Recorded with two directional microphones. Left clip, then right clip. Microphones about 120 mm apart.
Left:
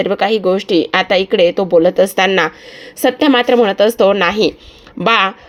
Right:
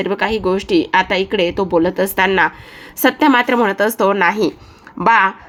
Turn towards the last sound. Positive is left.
turn(degrees=40)  # may be behind; listen again after turning